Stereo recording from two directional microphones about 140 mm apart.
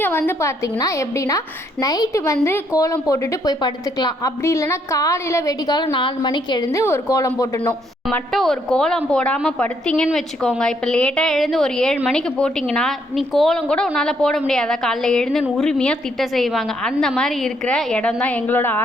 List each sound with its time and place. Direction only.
0.0 s a woman's voice: 15° left (ahead or behind); by 6.7 s 30° left (ahead or behind)
6.7 s a woman's voice: 20° left (ahead or behind)
8.3 s a woman's voice: centre (ahead or behind)